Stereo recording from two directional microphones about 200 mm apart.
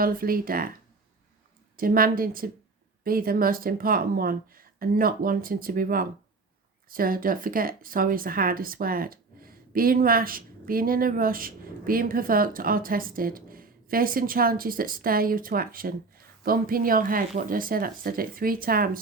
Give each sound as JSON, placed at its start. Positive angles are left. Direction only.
{"t": 0.0, "sound": "speech", "side_deg": -45}
{"t": 1.7, "sound": "speech", "side_deg": -45}